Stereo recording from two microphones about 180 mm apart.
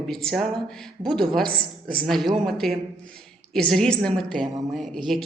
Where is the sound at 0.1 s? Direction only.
Centre (ahead or behind).